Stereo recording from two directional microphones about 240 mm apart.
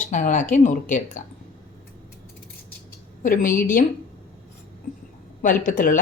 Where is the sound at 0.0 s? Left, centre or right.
Left.